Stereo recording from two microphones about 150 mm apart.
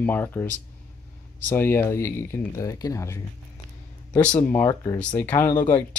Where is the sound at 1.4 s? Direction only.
15° left (ahead or behind).